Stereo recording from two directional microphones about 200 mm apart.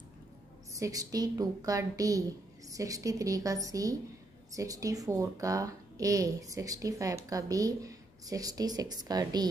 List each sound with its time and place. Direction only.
0.7 s speech: 15° right (ahead or behind)